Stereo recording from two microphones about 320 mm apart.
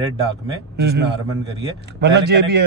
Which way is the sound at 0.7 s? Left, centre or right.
Right.